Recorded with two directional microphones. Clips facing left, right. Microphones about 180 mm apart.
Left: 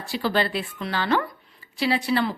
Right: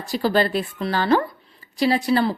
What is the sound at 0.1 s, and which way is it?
A woman's voice, 40° right (ahead or behind).